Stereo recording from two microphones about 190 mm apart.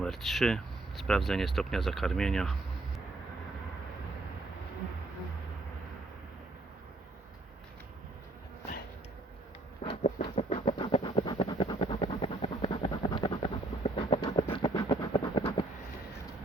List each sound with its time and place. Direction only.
0.0 s speech: centre (ahead or behind)
9.8 s a sound: 30° left (ahead or behind)
14.5 s train: 25° left (ahead or behind)